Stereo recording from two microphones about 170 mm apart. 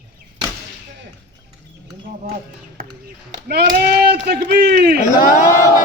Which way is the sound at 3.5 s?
65° right (ahead or behind).